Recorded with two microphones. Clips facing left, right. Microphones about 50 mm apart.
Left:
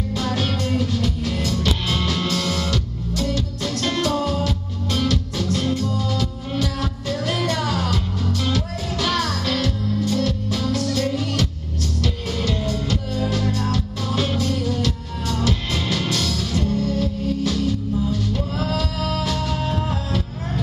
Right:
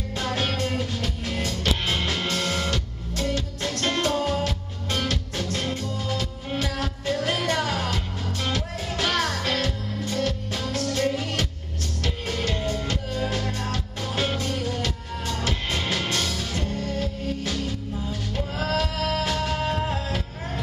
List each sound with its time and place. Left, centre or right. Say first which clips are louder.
0.2 s music: left 1 dB; right